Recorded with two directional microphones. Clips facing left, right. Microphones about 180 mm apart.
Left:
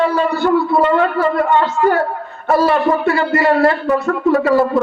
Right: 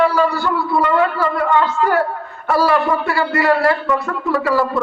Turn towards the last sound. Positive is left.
turn(degrees=25)  # may be behind; listen again after turning